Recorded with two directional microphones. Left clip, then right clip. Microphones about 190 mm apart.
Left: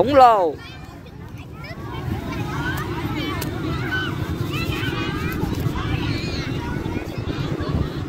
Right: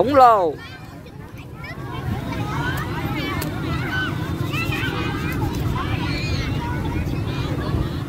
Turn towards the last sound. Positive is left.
turn(degrees=-55)  # may be behind; listen again after turning